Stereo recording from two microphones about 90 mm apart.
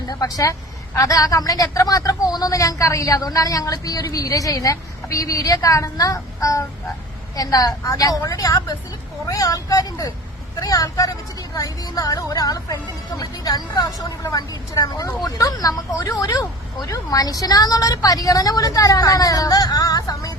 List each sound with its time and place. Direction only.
0.1 s speech: 40° left (ahead or behind)